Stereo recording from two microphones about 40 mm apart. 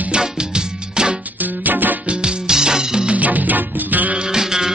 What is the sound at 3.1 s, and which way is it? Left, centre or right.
Music, right.